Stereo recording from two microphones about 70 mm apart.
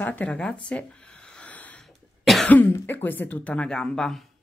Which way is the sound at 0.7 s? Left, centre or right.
Centre.